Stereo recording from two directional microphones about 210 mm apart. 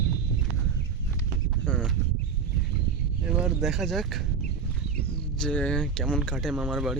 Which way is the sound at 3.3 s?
5° right (ahead or behind).